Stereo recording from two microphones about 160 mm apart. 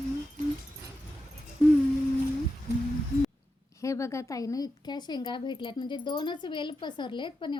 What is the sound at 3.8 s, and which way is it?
A woman's voice, 20° left (ahead or behind).